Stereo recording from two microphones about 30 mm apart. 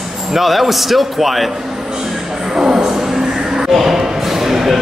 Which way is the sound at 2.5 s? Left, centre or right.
Right.